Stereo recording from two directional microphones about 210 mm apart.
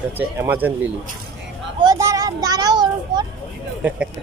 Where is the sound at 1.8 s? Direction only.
15° right (ahead or behind).